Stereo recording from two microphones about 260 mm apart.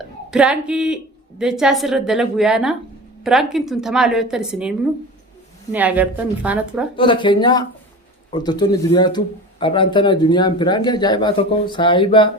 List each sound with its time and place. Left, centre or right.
0.3 s a woman's voice: centre
5.7 s a woman's voice: centre
6.9 s speech: centre